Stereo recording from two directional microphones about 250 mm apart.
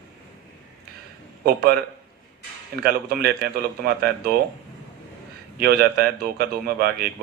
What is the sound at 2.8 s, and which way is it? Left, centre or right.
A man's voice, right.